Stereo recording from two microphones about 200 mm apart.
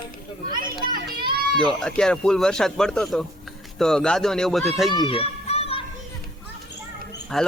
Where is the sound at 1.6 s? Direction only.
5° left (ahead or behind).